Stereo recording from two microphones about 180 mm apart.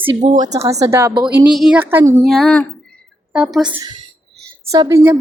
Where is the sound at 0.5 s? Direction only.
20° right (ahead or behind).